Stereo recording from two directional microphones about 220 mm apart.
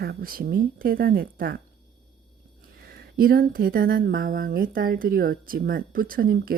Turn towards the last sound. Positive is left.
turn(degrees=-40)  # may be behind; listen again after turning